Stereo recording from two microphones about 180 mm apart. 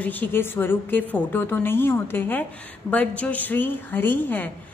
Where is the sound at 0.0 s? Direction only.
10° left (ahead or behind).